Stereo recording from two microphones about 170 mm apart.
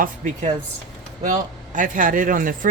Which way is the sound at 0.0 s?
45° right (ahead or behind).